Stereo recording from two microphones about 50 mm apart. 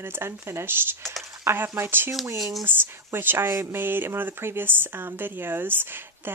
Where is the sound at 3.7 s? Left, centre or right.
Right.